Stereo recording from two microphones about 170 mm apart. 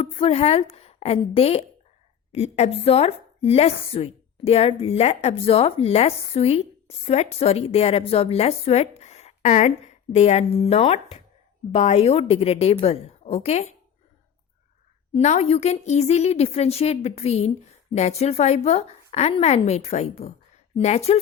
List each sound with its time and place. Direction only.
0.0 s a woman's voice: 35° left (ahead or behind)
15.1 s speech: 40° left (ahead or behind)